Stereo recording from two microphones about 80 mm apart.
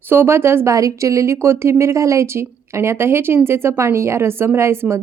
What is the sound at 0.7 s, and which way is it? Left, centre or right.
A woman's voice, right.